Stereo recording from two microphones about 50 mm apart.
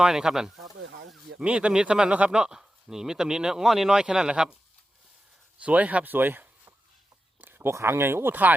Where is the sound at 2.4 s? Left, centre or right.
Centre.